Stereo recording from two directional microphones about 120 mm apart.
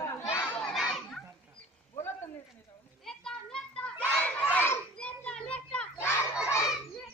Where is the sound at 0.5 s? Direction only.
10° left (ahead or behind).